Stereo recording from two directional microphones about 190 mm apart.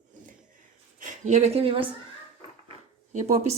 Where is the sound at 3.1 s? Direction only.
40° right (ahead or behind).